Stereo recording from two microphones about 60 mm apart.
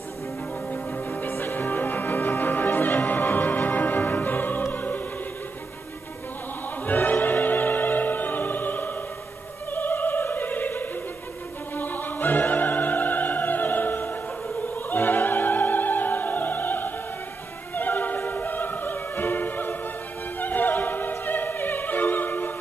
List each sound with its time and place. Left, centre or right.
0.7 s music: left
6.9 s music: left
9.7 s opera: left